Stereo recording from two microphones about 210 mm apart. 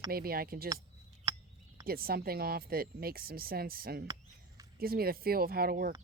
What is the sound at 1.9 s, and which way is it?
Speech, 45° right (ahead or behind).